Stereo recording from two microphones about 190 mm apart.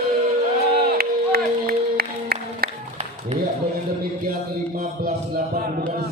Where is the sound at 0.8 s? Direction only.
55° right (ahead or behind).